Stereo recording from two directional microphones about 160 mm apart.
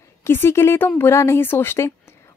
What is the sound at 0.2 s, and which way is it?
A woman's voice, 15° left (ahead or behind).